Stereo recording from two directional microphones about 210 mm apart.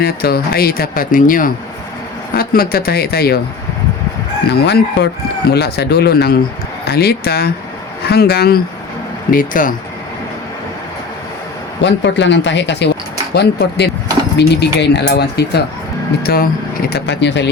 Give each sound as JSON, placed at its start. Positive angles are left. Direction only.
{"t": 0.0, "sound": "speech", "side_deg": 45}
{"t": 4.5, "sound": "speech", "side_deg": 50}
{"t": 11.8, "sound": "speech", "side_deg": 60}
{"t": 16.9, "sound": "speech", "side_deg": 55}